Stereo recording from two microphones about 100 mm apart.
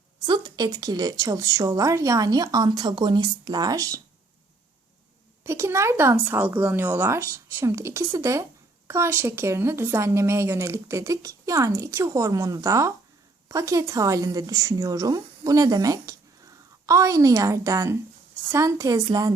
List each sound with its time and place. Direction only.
0.3 s a woman's voice: 40° right (ahead or behind)
5.4 s a woman's voice: 25° right (ahead or behind)